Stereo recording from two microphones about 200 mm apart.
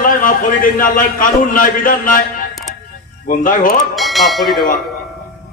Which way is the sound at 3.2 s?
45° left (ahead or behind).